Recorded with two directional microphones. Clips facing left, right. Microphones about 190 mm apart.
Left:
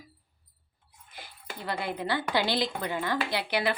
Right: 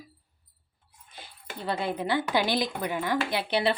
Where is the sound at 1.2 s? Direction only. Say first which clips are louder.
Right 3 dB; 20° right (ahead or behind).